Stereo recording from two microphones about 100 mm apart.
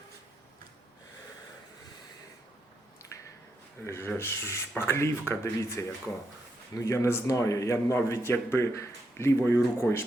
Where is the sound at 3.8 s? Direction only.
25° left (ahead or behind).